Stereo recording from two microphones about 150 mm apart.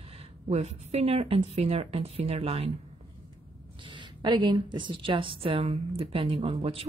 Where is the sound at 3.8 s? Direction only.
30° right (ahead or behind).